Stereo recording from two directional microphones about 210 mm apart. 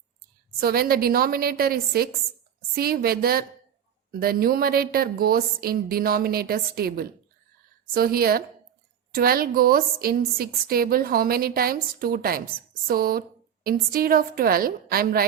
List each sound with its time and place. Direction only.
0.6 s a woman's voice: 45° right (ahead or behind)